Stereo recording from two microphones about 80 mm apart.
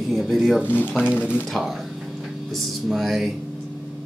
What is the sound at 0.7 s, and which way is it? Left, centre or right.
Speech, left.